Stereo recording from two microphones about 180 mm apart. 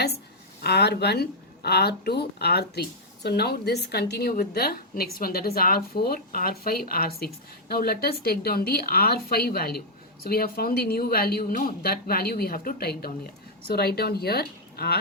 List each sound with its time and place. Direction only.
0.6 s a woman's voice: 65° left (ahead or behind)